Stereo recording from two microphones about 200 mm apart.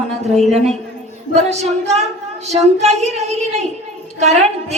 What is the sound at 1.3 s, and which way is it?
A woman's voice, 35° right (ahead or behind).